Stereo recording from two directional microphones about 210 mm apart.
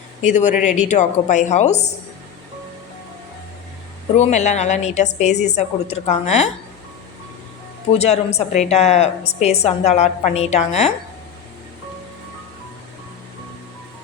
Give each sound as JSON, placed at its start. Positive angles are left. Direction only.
{"t": 0.2, "sound": "a woman's voice", "side_deg": 35}
{"t": 4.2, "sound": "a woman's voice", "side_deg": 35}
{"t": 7.9, "sound": "a woman's voice", "side_deg": 30}